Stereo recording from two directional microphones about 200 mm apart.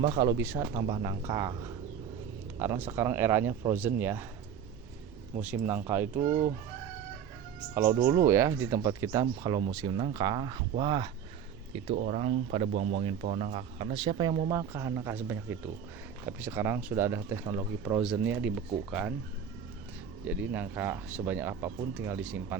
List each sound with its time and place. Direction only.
0.1 s speech: 20° right (ahead or behind)
0.7 s speech: 25° right (ahead or behind)
2.6 s speech: 10° right (ahead or behind)
5.4 s speech: 10° right (ahead or behind)
6.2 s speech: 35° right (ahead or behind)
7.7 s speech: 15° right (ahead or behind)
11.9 s speech: 40° right (ahead or behind); by 17.6 s 15° right (ahead or behind)
17.8 s speech: 5° right (ahead or behind)
20.2 s speech: 10° right (ahead or behind)